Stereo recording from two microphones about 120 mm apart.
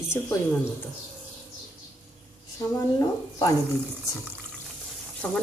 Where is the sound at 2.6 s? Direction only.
30° left (ahead or behind).